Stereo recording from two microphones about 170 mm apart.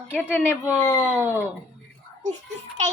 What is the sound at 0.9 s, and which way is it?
Speech, 10° right (ahead or behind).